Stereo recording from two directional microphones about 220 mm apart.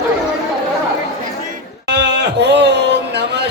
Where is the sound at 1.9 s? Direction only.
50° right (ahead or behind).